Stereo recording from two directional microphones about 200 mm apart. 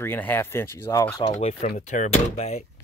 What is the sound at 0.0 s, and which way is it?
Speech, 10° left (ahead or behind).